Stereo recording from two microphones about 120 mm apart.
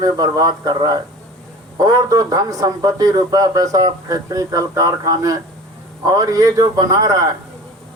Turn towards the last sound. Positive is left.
turn(degrees=-30)  # may be behind; listen again after turning